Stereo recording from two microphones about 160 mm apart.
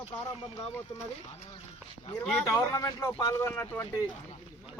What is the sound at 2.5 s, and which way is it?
Speech, 20° left (ahead or behind).